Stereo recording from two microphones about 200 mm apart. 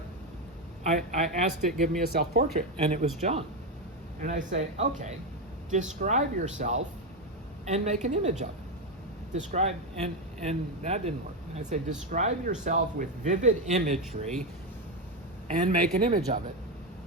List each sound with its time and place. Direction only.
0.9 s speech: 35° right (ahead or behind)
15.4 s speech: 35° right (ahead or behind)